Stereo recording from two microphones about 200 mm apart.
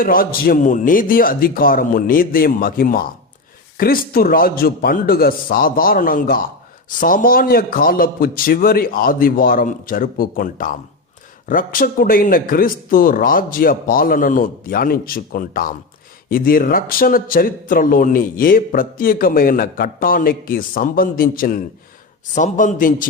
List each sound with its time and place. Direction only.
0.0 s a man's voice: 45° left (ahead or behind)